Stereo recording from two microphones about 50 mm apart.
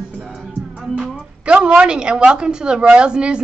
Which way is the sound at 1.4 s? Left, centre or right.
Right.